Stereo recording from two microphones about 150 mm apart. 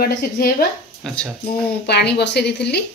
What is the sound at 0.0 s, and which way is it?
Speech, 85° left.